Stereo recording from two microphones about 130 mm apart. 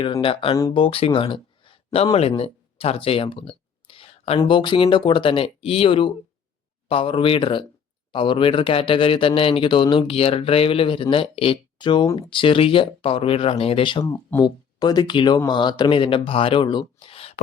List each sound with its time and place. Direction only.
0.0 s a man's voice: 45° left (ahead or behind)
2.1 s a sound: 50° left (ahead or behind)
4.4 s a man's voice: 40° left (ahead or behind)
14.0 s speech: 20° left (ahead or behind)
14.4 s speech: 35° left (ahead or behind); by 17.4 s 50° left (ahead or behind)